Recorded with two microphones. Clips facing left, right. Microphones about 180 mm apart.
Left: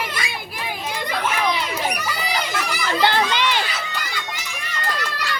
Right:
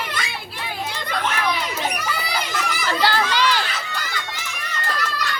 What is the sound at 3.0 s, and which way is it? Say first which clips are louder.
Children playing: left 1 dB; 20° left (ahead or behind).